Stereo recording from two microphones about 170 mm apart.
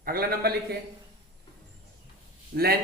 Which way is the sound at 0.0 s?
60° right (ahead or behind).